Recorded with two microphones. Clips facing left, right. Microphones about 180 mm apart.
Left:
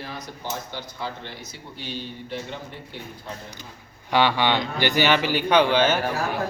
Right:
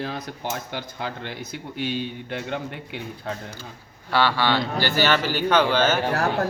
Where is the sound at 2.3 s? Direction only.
75° right (ahead or behind).